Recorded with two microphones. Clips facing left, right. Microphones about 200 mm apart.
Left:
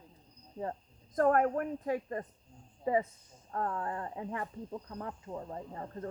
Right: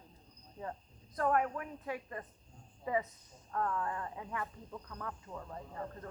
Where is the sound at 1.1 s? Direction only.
45° left (ahead or behind).